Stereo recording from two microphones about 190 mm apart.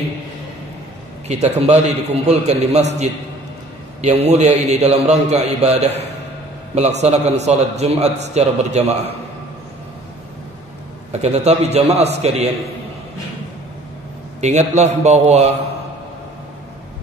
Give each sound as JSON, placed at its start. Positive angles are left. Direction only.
{"t": 1.2, "sound": "a man's voice", "side_deg": -35}
{"t": 11.1, "sound": "a man's voice", "side_deg": -35}
{"t": 14.4, "sound": "a man's voice", "side_deg": -35}